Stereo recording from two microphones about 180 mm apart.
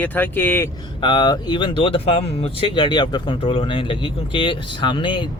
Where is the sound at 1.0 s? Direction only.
25° left (ahead or behind).